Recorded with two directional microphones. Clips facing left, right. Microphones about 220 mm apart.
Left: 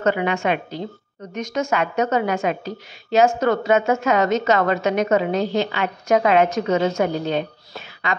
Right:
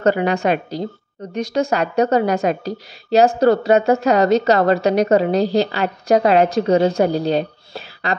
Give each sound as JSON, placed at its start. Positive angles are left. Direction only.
{"t": 0.0, "sound": "a woman's voice", "side_deg": -35}